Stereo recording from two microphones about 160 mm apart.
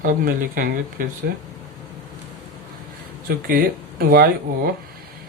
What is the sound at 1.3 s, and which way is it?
Speech, 80° right.